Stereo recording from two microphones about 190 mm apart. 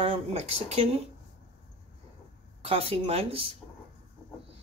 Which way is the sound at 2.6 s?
30° right (ahead or behind).